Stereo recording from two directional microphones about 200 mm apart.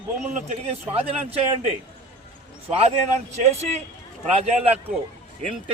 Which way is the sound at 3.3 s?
35° right (ahead or behind).